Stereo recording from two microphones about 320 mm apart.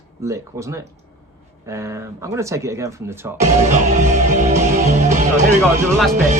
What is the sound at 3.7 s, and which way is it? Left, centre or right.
Music, right.